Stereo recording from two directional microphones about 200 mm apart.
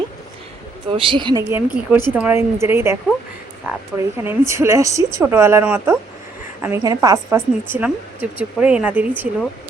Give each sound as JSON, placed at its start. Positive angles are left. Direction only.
{"t": 0.9, "sound": "a woman's voice", "side_deg": -25}